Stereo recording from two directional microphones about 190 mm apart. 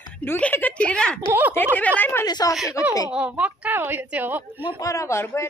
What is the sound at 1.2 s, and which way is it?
Speech, 10° right (ahead or behind).